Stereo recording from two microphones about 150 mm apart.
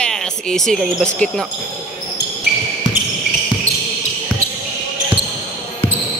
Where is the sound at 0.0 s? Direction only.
5° left (ahead or behind).